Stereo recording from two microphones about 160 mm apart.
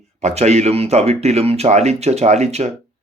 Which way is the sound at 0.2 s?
45° right (ahead or behind).